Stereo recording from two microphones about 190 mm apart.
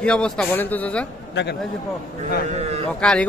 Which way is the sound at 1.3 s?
65° left (ahead or behind).